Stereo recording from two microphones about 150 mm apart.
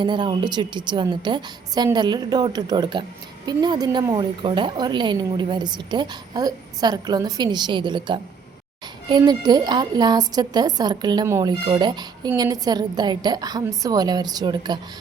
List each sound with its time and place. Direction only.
0.0 s a woman's voice: 30° right (ahead or behind)
11.6 s a woman's voice: 30° right (ahead or behind)